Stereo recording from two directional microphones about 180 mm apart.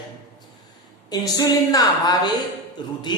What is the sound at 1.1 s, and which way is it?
Speech, 20° left (ahead or behind).